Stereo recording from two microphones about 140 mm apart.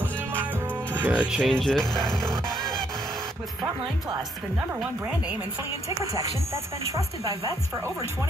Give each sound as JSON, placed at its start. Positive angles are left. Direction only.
{"t": 0.9, "sound": "speech", "side_deg": -10}
{"t": 1.4, "sound": "speech", "side_deg": 5}
{"t": 4.6, "sound": "speech", "side_deg": -10}
{"t": 5.9, "sound": "speech", "side_deg": -20}